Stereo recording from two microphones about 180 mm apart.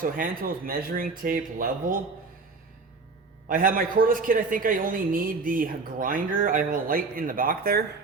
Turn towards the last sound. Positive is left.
turn(degrees=-55)  # may be behind; listen again after turning